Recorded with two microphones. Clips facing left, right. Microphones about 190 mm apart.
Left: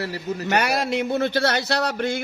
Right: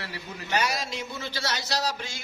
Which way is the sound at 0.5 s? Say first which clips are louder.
Left 6 dB; 60° left (ahead or behind).